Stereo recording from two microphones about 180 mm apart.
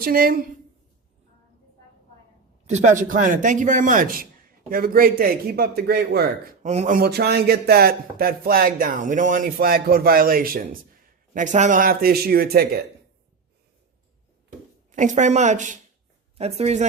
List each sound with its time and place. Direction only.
0.0 s speech: 55° right (ahead or behind)
2.7 s speech: 45° right (ahead or behind); by 6.2 s 65° right (ahead or behind)
6.6 s speech: 40° right (ahead or behind)
11.3 s speech: 40° right (ahead or behind); by 12.6 s 60° right (ahead or behind)
14.9 s speech: 45° right (ahead or behind)